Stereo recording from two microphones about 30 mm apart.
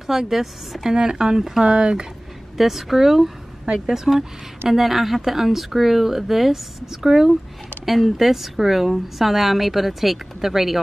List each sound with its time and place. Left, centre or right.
0.0 s a woman's voice: centre
1.8 s speech: right
2.5 s a woman's voice: centre